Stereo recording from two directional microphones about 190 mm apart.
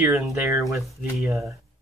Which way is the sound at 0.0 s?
10° right (ahead or behind).